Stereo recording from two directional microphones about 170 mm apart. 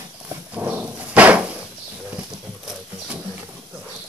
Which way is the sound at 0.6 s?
10° right (ahead or behind).